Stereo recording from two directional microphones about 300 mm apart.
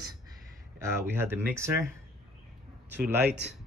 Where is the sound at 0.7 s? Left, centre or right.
Centre.